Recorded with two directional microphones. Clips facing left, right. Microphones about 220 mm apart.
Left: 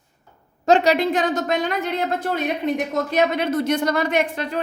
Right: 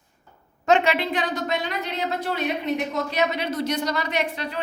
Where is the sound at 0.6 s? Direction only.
40° left (ahead or behind).